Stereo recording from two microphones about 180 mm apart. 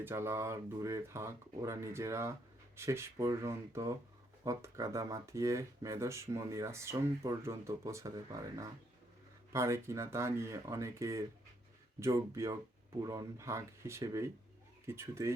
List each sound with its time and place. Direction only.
0.0 s speech: 15° right (ahead or behind)